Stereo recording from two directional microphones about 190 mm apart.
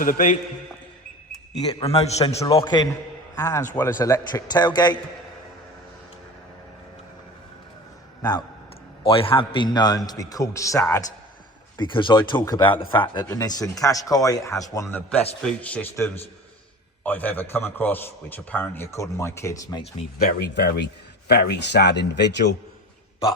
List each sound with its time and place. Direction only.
0.0 s a man's voice: 45° left (ahead or behind)
1.8 s a man's voice: 35° left (ahead or behind)
2.6 s a man's voice: 20° left (ahead or behind)
8.2 s a man's voice: 20° left (ahead or behind)
20.1 s a man's voice: 60° left (ahead or behind)